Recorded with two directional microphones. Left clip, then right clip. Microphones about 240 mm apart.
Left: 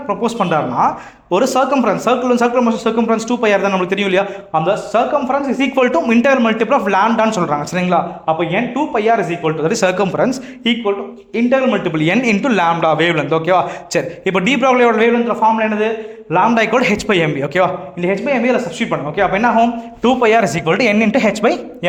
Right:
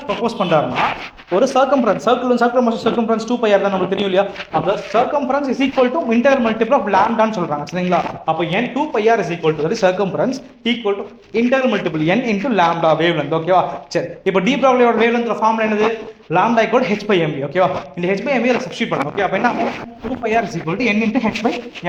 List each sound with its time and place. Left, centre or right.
0.3 s a man's voice: left
9.6 s a man's voice: left
12.1 s a man's voice: left
18.0 s speech: left
20.2 s speech: left